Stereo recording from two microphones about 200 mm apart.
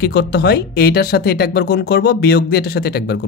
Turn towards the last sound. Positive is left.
turn(degrees=50)  # may be behind; listen again after turning